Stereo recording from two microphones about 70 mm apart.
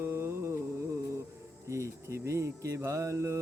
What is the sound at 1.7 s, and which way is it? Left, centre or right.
Mantra, right.